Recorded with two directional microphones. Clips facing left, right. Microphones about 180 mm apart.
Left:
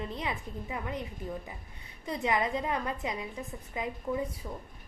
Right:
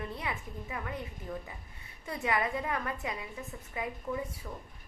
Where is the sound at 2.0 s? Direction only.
20° left (ahead or behind).